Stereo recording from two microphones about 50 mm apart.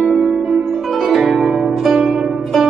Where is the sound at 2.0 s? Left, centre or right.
Centre.